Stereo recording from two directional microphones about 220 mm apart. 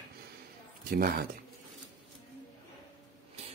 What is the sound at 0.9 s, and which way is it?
Speech, 40° right (ahead or behind).